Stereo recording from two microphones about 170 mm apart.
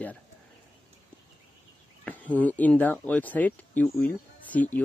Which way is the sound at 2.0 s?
10° left (ahead or behind).